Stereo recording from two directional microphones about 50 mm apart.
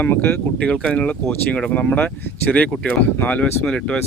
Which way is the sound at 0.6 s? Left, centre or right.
Centre.